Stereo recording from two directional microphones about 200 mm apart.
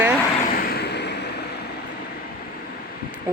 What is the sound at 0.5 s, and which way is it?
Vehicle, 55° left (ahead or behind).